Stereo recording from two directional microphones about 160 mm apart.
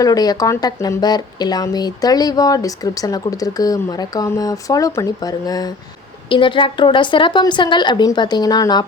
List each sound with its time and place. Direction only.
0.0 s speech: 25° left (ahead or behind)